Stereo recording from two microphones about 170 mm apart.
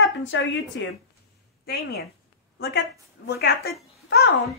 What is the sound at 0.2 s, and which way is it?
Speech, 90° left.